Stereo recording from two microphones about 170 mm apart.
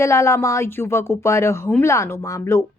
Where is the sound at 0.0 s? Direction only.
15° left (ahead or behind).